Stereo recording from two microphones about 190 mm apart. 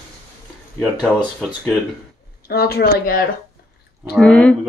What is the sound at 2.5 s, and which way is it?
Speech, 55° left (ahead or behind).